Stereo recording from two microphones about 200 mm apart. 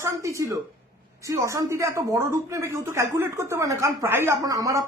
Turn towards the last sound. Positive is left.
turn(degrees=-15)  # may be behind; listen again after turning